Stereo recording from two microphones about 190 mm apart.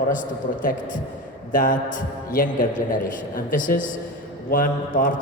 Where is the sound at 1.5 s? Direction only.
45° left (ahead or behind).